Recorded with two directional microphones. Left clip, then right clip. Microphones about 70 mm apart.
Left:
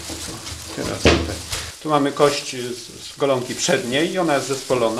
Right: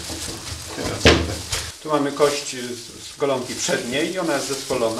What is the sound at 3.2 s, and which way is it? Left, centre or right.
Speech, centre.